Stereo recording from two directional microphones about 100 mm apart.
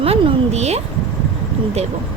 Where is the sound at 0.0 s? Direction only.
85° right.